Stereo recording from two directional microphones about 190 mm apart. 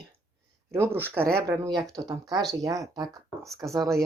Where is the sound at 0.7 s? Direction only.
10° right (ahead or behind).